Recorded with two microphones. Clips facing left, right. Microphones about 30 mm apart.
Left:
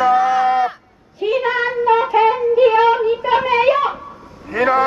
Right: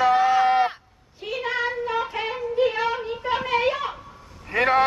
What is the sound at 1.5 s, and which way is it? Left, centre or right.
Speech, left.